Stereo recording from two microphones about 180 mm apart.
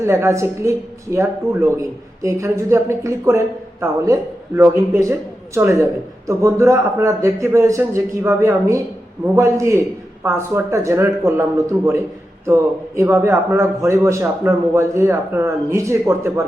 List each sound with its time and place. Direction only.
0.0 s a woman's voice: 15° right (ahead or behind)